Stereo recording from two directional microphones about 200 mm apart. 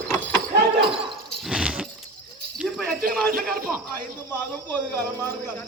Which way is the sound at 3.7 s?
Centre (ahead or behind).